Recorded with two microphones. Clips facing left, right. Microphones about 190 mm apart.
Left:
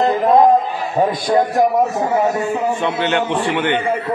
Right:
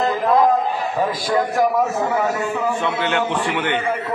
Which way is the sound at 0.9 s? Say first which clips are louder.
Left 6 dB; 20° left (ahead or behind).